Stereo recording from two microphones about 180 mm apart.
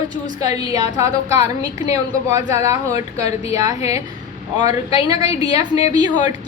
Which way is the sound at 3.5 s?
20° right (ahead or behind).